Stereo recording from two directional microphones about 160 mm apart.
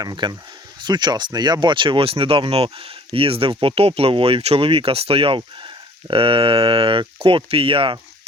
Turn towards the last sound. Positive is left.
turn(degrees=-30)  # may be behind; listen again after turning